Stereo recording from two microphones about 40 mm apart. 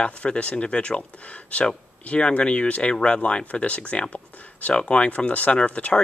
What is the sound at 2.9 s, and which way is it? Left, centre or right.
Speech, left.